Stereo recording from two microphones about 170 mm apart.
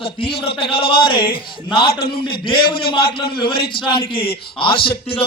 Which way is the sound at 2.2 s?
30° left (ahead or behind).